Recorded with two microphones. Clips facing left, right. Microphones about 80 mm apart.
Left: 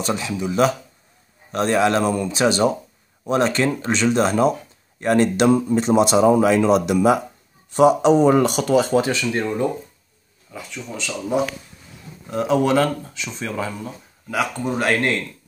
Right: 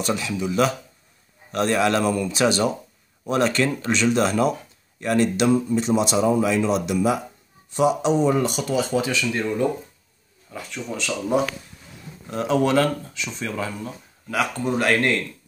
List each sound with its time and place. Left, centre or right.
0.0 s speech: left
5.0 s speech: left
8.9 s speech: left
10.5 s speech: centre
12.3 s speech: centre
14.8 s speech: left